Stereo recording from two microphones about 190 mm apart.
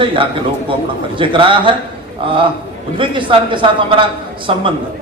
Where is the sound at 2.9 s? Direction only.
25° right (ahead or behind).